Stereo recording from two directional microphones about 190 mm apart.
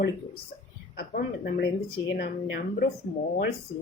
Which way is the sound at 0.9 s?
55° left (ahead or behind).